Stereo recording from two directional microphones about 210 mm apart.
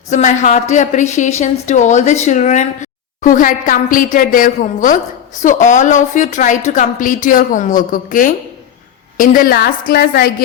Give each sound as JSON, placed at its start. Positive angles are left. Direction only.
{"t": 0.1, "sound": "a woman's voice", "side_deg": 35}